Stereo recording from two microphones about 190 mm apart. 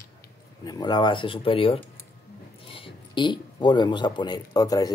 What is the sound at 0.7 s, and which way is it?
Speech, 20° left (ahead or behind).